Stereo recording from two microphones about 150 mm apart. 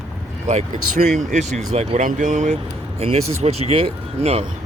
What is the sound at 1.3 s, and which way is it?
Speech, 55° right (ahead or behind).